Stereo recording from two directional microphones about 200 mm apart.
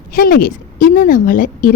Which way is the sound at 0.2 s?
45° left (ahead or behind).